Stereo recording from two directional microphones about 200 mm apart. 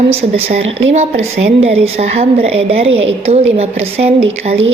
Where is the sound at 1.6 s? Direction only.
30° right (ahead or behind).